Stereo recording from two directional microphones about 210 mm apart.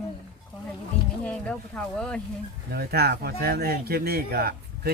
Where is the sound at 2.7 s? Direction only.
50° right (ahead or behind).